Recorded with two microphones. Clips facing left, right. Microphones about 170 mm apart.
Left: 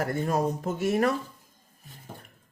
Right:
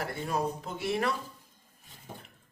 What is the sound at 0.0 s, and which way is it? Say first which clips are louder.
Speech: left 5 dB; 45° left (ahead or behind).